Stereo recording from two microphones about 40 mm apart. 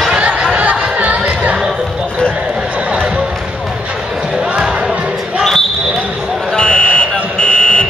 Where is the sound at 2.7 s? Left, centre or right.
Right.